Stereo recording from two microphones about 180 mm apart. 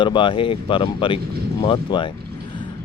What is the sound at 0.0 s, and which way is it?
Speech, 25° left (ahead or behind).